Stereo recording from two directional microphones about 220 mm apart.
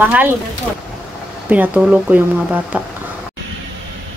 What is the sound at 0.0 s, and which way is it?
Speech, 10° right (ahead or behind).